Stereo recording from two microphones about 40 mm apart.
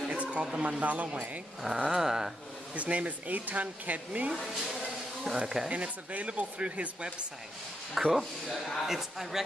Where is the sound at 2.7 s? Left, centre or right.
Right.